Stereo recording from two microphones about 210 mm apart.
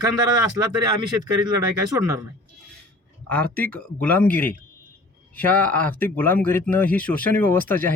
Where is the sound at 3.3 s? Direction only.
5° left (ahead or behind).